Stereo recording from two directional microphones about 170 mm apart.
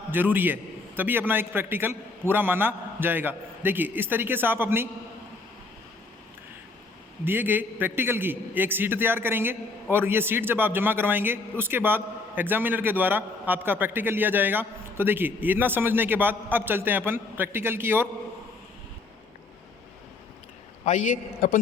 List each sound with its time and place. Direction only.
0.1 s a man's voice: 10° right (ahead or behind)
7.3 s a man's voice: 10° right (ahead or behind)
20.8 s a man's voice: 45° left (ahead or behind)